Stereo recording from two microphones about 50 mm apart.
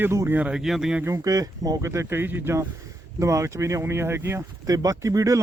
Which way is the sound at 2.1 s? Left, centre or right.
Right.